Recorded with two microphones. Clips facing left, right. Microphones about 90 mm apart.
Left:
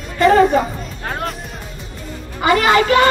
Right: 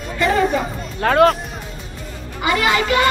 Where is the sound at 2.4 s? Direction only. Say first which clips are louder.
Left 4 dB; 45° left (ahead or behind).